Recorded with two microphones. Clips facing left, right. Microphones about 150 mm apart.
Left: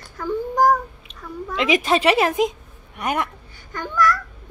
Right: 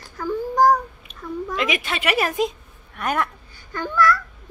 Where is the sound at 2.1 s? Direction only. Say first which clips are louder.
Left 3 dB; 20° left (ahead or behind).